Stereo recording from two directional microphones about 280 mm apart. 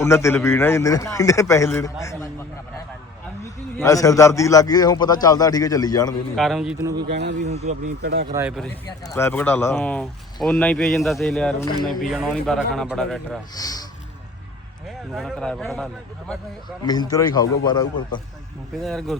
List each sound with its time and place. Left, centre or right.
0.0 s a man's voice: centre
3.4 s a man's voice: centre
6.3 s speech: centre
7.1 s speech: right
7.4 s speech: right
8.3 s speech: centre
8.9 s speech: centre
13.6 s a man's voice: centre
15.1 s speech: centre
16.8 s a man's voice: centre
18.8 s speech: centre